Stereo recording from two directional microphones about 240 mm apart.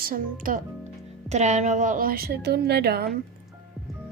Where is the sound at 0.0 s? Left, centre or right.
Right.